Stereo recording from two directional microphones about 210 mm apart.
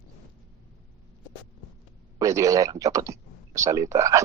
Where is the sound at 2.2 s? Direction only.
15° right (ahead or behind).